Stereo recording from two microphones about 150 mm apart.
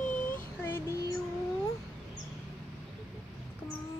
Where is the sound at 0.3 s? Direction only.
15° left (ahead or behind).